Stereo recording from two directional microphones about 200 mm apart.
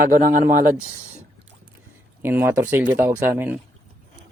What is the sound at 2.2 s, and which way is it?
Speech, 10° right (ahead or behind).